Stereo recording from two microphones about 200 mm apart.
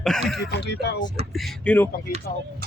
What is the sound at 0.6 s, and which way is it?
Speech, 60° left (ahead or behind).